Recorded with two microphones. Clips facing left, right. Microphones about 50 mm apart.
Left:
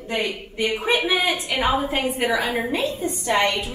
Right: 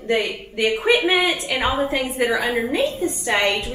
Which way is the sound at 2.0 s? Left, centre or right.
Right.